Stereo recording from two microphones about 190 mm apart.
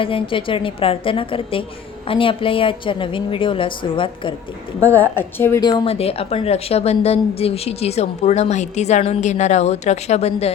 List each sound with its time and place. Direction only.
0.0 s a woman's voice: 25° left (ahead or behind)
4.8 s a woman's voice: 10° left (ahead or behind); by 10.5 s 35° left (ahead or behind)